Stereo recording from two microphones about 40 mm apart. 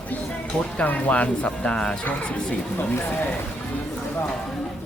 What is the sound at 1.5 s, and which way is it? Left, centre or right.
Speech, left.